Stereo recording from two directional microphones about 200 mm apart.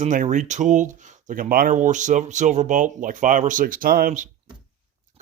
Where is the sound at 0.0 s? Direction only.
40° right (ahead or behind).